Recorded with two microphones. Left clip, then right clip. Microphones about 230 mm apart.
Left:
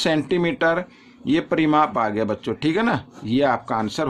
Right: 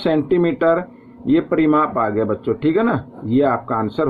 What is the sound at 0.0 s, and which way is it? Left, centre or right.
Speech, left.